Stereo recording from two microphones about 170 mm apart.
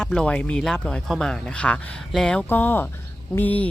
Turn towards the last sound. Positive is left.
turn(degrees=10)  # may be behind; listen again after turning